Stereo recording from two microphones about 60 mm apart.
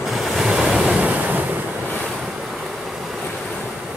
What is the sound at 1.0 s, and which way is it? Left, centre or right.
Waves, right.